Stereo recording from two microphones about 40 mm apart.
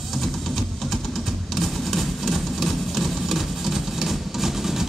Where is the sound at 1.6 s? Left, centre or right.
Centre.